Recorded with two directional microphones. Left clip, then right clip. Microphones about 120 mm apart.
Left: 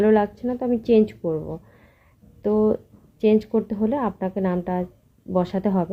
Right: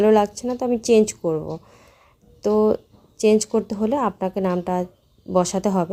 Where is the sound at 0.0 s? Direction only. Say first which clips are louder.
Right 2 dB; 20° right (ahead or behind).